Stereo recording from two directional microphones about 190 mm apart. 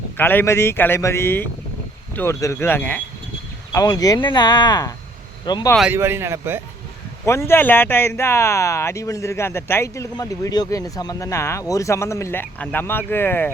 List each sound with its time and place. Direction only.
0.2 s speech: 10° left (ahead or behind)
5.7 s speech: 5° right (ahead or behind)
7.3 s speech: 15° left (ahead or behind)